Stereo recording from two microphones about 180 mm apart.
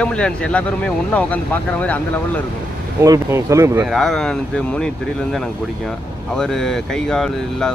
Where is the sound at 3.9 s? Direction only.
Centre (ahead or behind).